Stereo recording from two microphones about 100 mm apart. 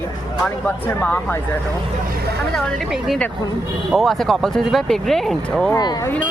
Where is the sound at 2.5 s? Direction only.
5° left (ahead or behind).